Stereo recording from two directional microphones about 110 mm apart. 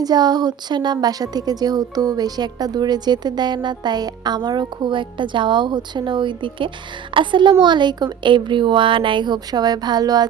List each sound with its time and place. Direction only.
0.0 s a woman's voice: 40° right (ahead or behind)